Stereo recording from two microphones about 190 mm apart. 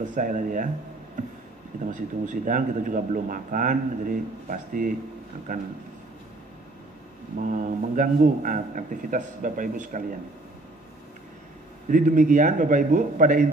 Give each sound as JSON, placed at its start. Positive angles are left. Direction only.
{"t": 0.0, "sound": "a man's voice", "side_deg": -40}
{"t": 1.9, "sound": "a man's voice", "side_deg": -40}
{"t": 7.3, "sound": "a man's voice", "side_deg": -45}
{"t": 11.9, "sound": "a man's voice", "side_deg": -45}